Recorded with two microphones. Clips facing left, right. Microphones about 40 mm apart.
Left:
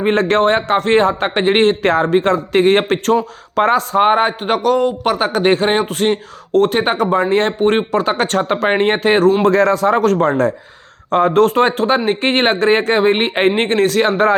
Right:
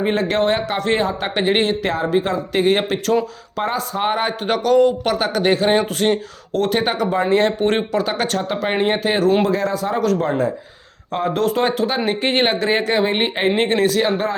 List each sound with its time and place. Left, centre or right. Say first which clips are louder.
0.2 s speech: left 5 dB; left
4.0 s a man's voice: left 3 dB; left
5.1 s speech: left 3 dB; left
7.7 s a man's voice: left 4 dB; left
7.9 s speech: left 4 dB; left
9.4 s speech: left 7 dB; left